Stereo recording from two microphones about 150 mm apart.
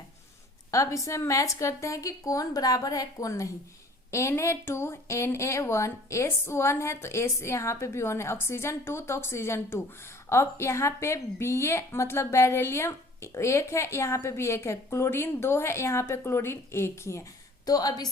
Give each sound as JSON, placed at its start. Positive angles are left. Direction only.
{"t": 0.7, "sound": "a woman's voice", "side_deg": 20}